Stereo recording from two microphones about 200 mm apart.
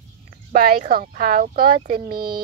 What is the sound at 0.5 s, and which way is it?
Speech, 45° right (ahead or behind).